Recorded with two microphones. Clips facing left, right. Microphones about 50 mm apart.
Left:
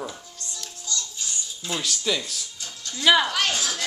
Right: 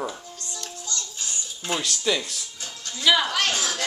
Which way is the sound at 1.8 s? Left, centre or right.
Centre.